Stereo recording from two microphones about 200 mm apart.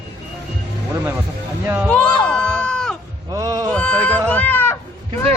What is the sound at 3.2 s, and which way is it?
Music, 15° right (ahead or behind).